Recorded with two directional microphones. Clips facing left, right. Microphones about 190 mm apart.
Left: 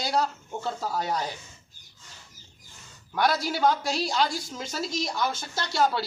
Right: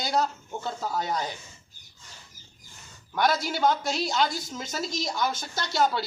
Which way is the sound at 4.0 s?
35° left (ahead or behind).